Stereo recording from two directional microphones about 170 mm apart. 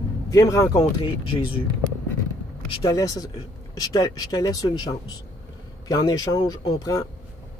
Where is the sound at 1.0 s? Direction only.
30° left (ahead or behind).